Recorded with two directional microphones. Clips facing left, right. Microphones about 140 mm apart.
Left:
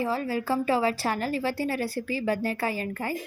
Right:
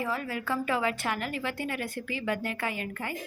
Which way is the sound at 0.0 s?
30° left (ahead or behind).